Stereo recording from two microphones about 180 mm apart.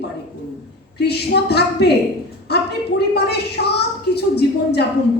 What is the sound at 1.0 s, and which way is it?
Speech, 65° left (ahead or behind).